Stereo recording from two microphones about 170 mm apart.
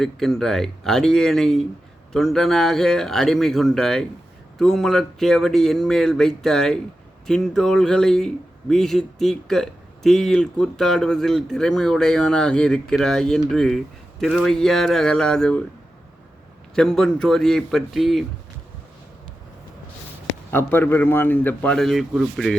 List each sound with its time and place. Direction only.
0.0 s speech: centre (ahead or behind)
16.7 s speech: 5° left (ahead or behind)
20.5 s a man's voice: 15° left (ahead or behind)